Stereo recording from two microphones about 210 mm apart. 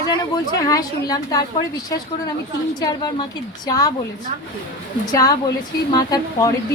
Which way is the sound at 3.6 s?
20° left (ahead or behind).